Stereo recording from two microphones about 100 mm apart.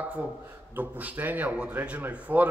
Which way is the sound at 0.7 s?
15° right (ahead or behind).